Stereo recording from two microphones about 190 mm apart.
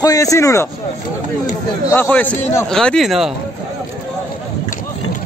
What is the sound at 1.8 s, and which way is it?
A man's voice, 10° left (ahead or behind).